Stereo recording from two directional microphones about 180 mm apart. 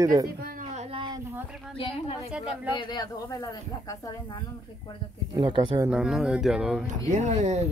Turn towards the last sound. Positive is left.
turn(degrees=-40)  # may be behind; listen again after turning